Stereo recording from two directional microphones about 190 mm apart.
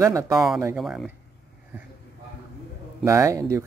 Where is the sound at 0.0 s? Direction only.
15° right (ahead or behind).